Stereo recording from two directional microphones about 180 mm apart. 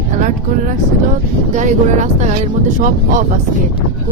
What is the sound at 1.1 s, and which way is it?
Speech, 45° right (ahead or behind).